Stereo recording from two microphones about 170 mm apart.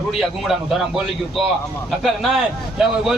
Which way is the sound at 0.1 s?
Centre (ahead or behind).